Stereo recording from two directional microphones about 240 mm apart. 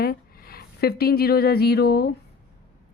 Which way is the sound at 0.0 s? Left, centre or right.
Left.